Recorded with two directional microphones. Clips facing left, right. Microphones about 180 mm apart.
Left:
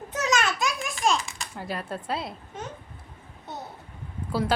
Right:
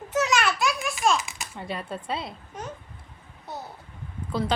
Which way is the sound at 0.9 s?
5° right (ahead or behind).